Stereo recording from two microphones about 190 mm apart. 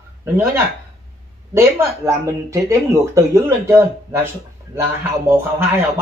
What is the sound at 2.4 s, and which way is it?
A man's voice, 15° right (ahead or behind).